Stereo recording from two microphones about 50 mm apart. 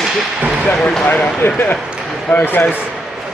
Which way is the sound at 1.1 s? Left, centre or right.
Left.